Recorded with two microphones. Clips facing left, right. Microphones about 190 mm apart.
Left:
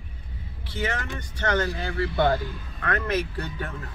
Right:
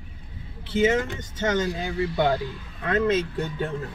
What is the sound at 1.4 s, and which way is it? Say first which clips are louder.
Speech: right 1 dB; 20° right (ahead or behind).